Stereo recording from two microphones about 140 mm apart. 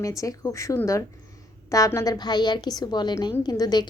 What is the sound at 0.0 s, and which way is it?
A woman's voice, 25° left (ahead or behind).